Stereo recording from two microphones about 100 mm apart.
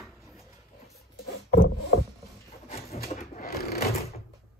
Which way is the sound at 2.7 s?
90° left.